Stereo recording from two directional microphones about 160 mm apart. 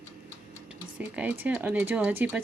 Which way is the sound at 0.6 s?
10° right (ahead or behind).